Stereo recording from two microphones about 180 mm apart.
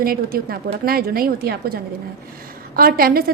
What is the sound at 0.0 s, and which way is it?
A woman's voice, 55° right (ahead or behind).